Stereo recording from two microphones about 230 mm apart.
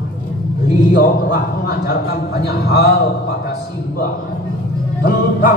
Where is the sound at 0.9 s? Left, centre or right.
Left.